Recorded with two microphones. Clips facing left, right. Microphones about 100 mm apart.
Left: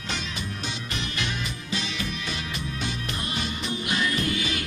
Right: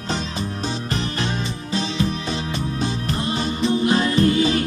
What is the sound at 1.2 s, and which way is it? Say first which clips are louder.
Music: right 6 dB; 35° right (ahead or behind).